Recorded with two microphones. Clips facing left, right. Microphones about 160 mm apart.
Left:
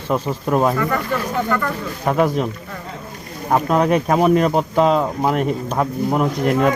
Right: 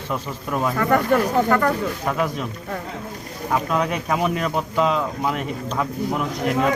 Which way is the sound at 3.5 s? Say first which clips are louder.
Left 6 dB; 45° left (ahead or behind).